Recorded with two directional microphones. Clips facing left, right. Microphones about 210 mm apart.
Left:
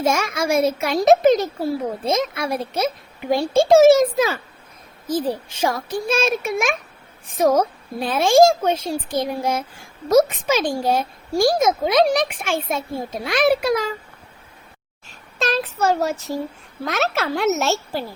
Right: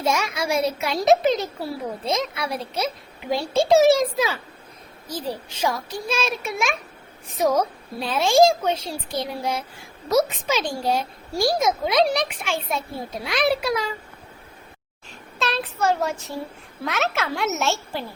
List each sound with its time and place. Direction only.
0.0 s a child's voice: 50° left (ahead or behind)
5.6 s a child's voice: 50° left (ahead or behind)
15.4 s speech: 45° left (ahead or behind)